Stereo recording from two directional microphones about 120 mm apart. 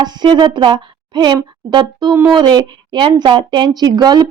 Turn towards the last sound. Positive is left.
turn(degrees=-35)  # may be behind; listen again after turning